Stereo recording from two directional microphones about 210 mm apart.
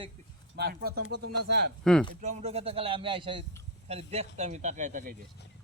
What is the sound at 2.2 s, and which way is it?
Speech, 35° right (ahead or behind).